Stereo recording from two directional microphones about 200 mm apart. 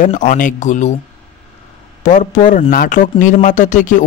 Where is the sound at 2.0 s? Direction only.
40° left (ahead or behind).